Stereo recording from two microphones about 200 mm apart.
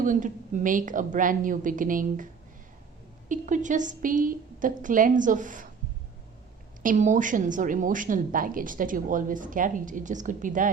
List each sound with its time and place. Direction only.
0.0 s a woman's voice: 40° right (ahead or behind)
3.2 s a woman's voice: 40° right (ahead or behind)
6.8 s a woman's voice: 40° right (ahead or behind)